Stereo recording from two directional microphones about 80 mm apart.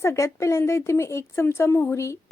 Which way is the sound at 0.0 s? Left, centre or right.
Left.